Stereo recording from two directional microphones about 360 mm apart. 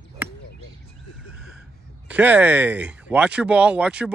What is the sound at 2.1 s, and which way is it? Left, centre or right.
Speech, centre.